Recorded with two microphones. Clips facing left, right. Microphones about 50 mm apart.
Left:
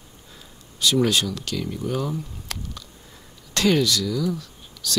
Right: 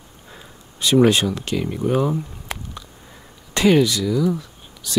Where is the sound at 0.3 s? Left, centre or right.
Right.